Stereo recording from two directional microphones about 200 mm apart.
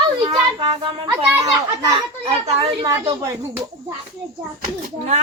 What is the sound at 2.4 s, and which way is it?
Speech, 30° right (ahead or behind).